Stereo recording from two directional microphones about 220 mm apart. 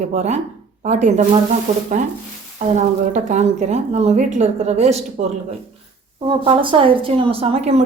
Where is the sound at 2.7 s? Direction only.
30° right (ahead or behind).